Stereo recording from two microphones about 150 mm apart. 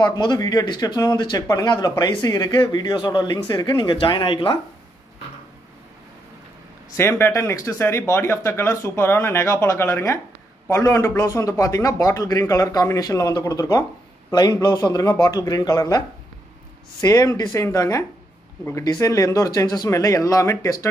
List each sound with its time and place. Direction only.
0.0 s speech: 30° left (ahead or behind)
7.0 s speech: 15° left (ahead or behind)
17.0 s speech: 20° left (ahead or behind)